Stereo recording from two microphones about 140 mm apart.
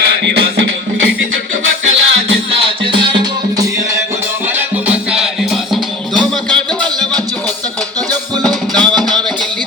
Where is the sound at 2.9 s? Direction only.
35° right (ahead or behind).